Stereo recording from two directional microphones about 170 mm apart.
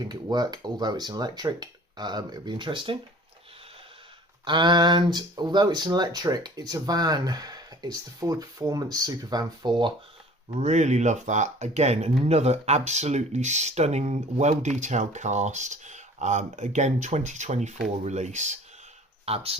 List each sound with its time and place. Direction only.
0.0 s speech: 25° right (ahead or behind)
4.4 s speech: 25° right (ahead or behind)
10.5 s speech: 40° right (ahead or behind)